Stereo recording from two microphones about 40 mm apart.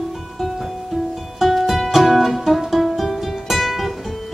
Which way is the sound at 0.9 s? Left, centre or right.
Centre.